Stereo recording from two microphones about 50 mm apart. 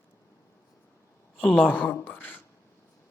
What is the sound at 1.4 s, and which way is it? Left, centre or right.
Speech, left.